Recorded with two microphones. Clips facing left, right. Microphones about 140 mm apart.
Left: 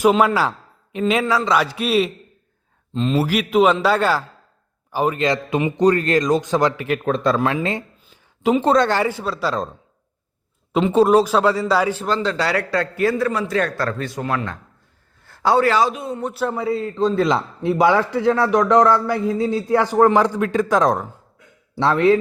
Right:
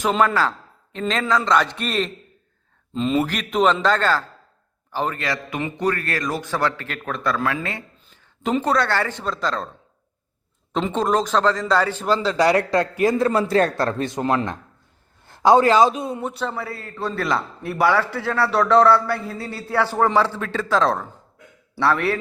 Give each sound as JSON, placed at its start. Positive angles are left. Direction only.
{"t": 0.0, "sound": "a man's voice", "side_deg": 5}
{"t": 8.4, "sound": "speech", "side_deg": 10}
{"t": 8.6, "sound": "a man's voice", "side_deg": 20}
{"t": 10.7, "sound": "a man's voice", "side_deg": 5}
{"t": 12.0, "sound": "a man's voice", "side_deg": -5}
{"t": 12.4, "sound": "a man's voice", "side_deg": -20}
{"t": 16.2, "sound": "a man's voice", "side_deg": 5}
{"t": 16.6, "sound": "a man's voice", "side_deg": 20}